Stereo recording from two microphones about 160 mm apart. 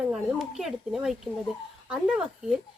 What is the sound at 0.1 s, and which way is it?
Speech, centre (ahead or behind).